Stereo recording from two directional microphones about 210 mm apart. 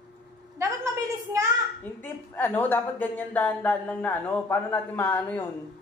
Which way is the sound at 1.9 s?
10° left (ahead or behind).